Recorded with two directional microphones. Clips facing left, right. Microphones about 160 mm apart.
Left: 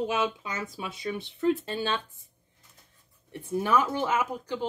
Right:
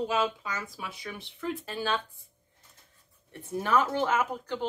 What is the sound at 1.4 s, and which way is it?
Speech, 25° left (ahead or behind).